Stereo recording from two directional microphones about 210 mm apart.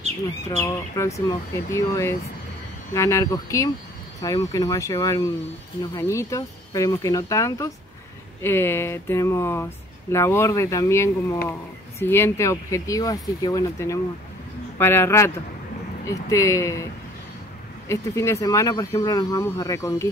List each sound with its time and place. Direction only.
0.5 s speech: 15° left (ahead or behind)